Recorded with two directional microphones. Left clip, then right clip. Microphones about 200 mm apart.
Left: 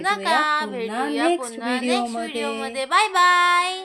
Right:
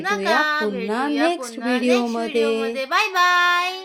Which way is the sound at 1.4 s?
Centre (ahead or behind).